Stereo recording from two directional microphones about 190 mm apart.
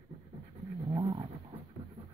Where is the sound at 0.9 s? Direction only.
20° right (ahead or behind).